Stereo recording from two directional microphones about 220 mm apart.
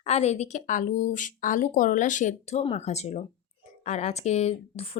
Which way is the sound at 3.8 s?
30° left (ahead or behind).